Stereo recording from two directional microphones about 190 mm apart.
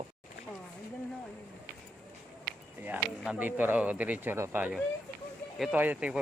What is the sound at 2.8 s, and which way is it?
Speech, 10° right (ahead or behind).